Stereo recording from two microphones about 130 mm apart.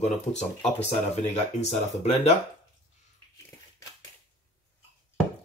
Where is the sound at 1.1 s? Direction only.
55° left (ahead or behind).